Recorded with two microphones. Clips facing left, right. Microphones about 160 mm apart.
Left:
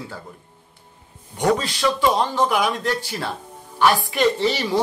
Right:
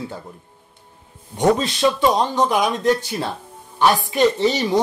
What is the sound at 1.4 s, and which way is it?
Speech, 20° right (ahead or behind).